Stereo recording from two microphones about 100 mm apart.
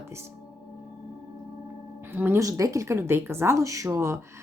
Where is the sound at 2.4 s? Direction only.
35° right (ahead or behind).